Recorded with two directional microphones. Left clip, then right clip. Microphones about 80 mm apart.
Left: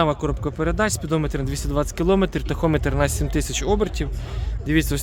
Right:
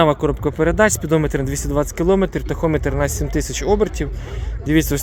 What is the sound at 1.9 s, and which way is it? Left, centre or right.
Speech, left.